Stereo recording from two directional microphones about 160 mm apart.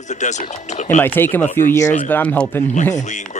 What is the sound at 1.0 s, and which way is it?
Speech, 15° left (ahead or behind).